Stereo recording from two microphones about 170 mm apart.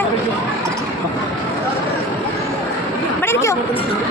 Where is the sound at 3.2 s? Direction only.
15° left (ahead or behind).